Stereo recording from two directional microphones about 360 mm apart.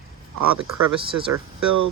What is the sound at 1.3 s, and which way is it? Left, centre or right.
Speech, right.